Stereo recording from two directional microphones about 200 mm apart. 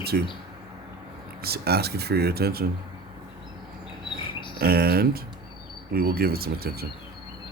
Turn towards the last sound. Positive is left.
turn(degrees=-50)  # may be behind; listen again after turning